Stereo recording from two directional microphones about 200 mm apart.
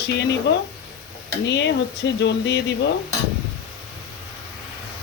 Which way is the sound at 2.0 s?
60° left (ahead or behind).